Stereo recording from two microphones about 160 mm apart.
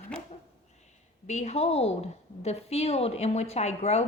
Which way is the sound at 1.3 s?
45° left (ahead or behind).